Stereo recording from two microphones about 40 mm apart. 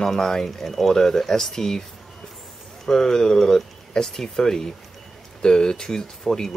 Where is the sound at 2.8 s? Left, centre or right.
Centre.